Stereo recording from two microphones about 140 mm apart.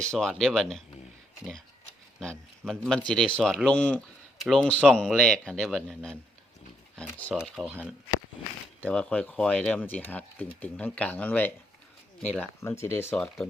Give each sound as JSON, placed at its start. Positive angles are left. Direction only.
{"t": 0.0, "sound": "speech", "side_deg": 5}
{"t": 2.6, "sound": "speech", "side_deg": 5}
{"t": 3.7, "sound": "speech", "side_deg": 10}
{"t": 7.3, "sound": "speech", "side_deg": 0}
{"t": 8.8, "sound": "speech", "side_deg": 10}